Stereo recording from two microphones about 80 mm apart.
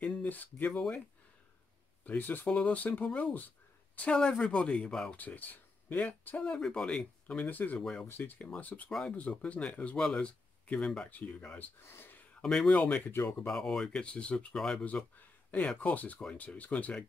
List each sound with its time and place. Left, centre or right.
0.0 s speech: centre
2.0 s speech: left
5.1 s speech: left
11.9 s a sound: left
12.4 s a man's voice: centre
13.1 s speech: left
13.5 s speech: centre